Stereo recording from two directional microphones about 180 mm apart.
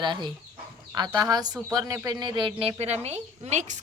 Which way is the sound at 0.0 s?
25° right (ahead or behind).